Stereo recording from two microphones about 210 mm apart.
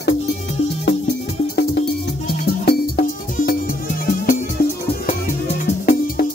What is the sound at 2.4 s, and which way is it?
Music, 45° left (ahead or behind).